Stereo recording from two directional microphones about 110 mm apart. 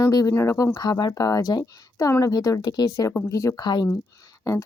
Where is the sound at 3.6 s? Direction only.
40° left (ahead or behind).